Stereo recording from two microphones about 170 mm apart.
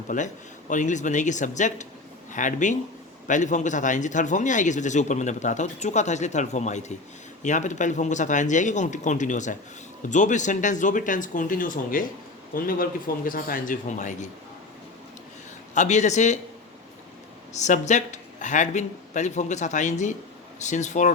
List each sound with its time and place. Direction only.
0.1 s a man's voice: 50° left (ahead or behind)
15.7 s speech: 45° left (ahead or behind)
17.5 s speech: 45° left (ahead or behind)